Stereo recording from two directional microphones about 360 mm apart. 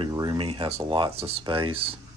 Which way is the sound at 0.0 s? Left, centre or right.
Centre.